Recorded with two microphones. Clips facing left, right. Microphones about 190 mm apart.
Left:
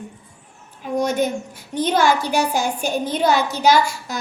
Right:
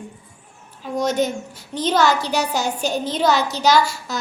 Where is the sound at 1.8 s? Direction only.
55° left (ahead or behind).